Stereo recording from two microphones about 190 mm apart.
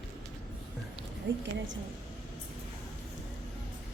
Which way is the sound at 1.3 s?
70° right (ahead or behind).